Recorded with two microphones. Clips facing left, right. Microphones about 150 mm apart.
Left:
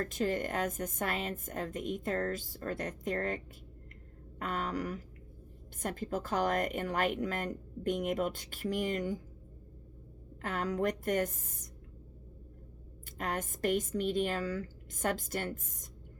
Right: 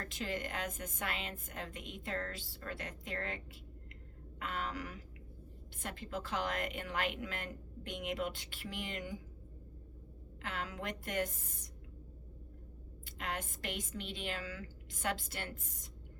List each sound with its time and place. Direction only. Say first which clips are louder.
0.0 s a woman's voice: left 8 dB; 45° left (ahead or behind)
10.4 s a woman's voice: left 9 dB; 45° left (ahead or behind)
13.1 s a woman's voice: left 5 dB; 45° left (ahead or behind)